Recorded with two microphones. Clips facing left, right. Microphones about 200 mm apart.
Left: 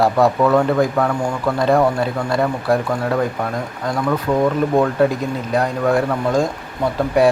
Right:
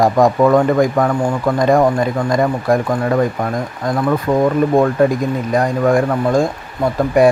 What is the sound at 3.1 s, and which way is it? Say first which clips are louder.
Speech: right 4 dB; 10° right (ahead or behind).